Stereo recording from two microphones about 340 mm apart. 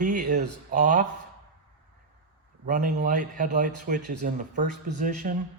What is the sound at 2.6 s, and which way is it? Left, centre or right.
Speech, right.